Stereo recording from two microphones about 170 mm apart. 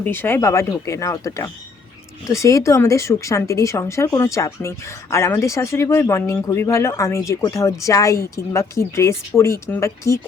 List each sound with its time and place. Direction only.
0.0 s speech: 10° left (ahead or behind)